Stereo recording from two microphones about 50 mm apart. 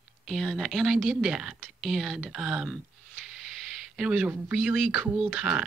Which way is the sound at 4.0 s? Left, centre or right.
Centre.